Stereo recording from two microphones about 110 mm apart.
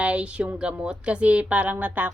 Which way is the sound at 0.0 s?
10° right (ahead or behind).